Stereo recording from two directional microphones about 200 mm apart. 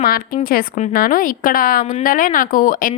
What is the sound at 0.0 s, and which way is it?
A woman's voice, 50° left (ahead or behind).